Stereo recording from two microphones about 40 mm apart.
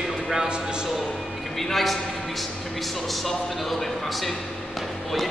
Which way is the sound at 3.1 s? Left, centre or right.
Centre.